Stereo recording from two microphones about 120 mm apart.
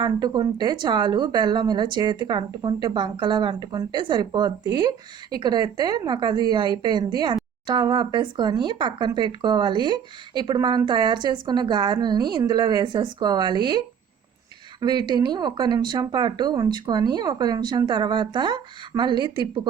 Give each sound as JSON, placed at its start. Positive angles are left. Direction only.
{"t": 0.0, "sound": "speech", "side_deg": -35}